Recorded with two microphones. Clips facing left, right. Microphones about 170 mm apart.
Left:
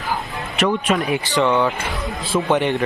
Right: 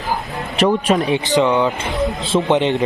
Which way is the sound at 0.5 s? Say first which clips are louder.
Right 4 dB; 30° right (ahead or behind).